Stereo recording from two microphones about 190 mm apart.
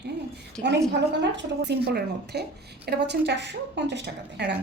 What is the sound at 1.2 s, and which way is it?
Speech, 65° right (ahead or behind).